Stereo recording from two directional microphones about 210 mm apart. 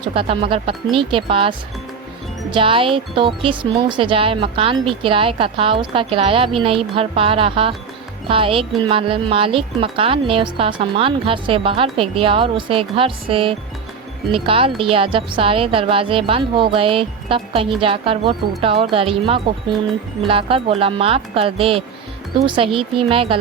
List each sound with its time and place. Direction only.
0.0 s speech: 25° right (ahead or behind)